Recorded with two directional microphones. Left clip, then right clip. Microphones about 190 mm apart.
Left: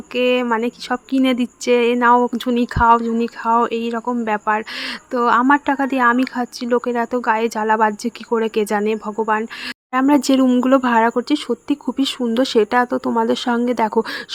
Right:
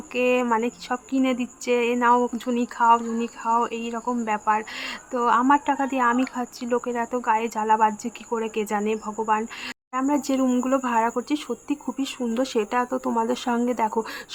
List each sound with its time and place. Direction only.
0.1 s speech: 25° left (ahead or behind)
9.9 s speech: 40° left (ahead or behind)